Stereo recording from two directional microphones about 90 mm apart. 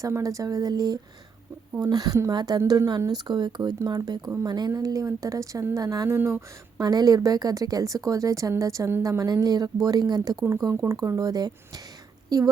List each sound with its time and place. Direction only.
0.0 s a woman's voice: 40° right (ahead or behind)
6.1 s speech: 25° right (ahead or behind)
6.7 s a woman's voice: 45° right (ahead or behind)